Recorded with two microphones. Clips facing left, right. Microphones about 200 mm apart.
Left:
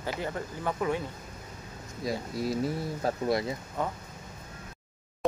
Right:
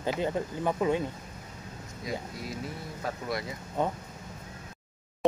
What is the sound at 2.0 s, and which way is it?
Speech, 35° left (ahead or behind).